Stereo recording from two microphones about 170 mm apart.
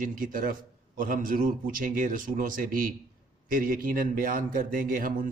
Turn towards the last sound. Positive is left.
turn(degrees=-55)  # may be behind; listen again after turning